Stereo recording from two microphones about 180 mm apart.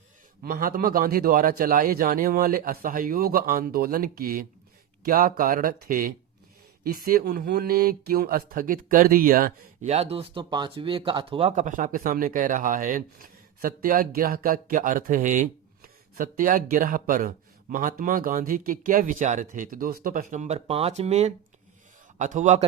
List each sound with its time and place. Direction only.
0.4 s speech: 50° right (ahead or behind)
9.9 s a man's voice: 35° right (ahead or behind)